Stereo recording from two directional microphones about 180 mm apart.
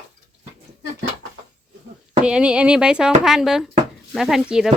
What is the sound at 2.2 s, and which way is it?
Speech, 5° right (ahead or behind).